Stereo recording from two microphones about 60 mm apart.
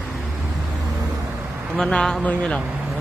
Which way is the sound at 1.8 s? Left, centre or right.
Centre.